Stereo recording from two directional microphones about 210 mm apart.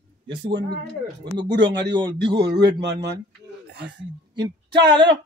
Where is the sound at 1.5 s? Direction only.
55° right (ahead or behind).